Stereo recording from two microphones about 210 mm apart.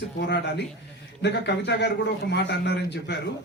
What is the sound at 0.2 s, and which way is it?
Speech, 55° left (ahead or behind).